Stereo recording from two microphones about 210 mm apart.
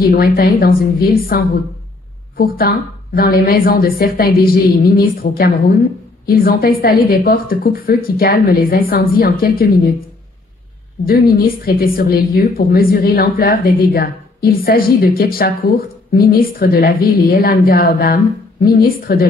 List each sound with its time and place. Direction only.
0.0 s a woman's voice: 45° left (ahead or behind)
11.1 s a woman's voice: 45° left (ahead or behind)